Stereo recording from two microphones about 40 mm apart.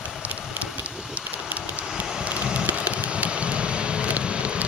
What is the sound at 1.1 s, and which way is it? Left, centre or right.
Vehicle, right.